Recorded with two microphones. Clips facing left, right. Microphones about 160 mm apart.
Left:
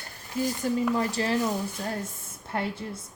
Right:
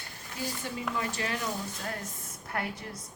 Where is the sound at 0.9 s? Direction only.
35° left (ahead or behind).